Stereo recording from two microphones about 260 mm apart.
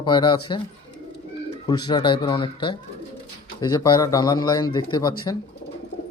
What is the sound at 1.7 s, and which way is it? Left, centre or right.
Speech, centre.